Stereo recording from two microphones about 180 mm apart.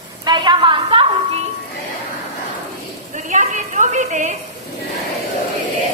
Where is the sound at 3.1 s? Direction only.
45° right (ahead or behind).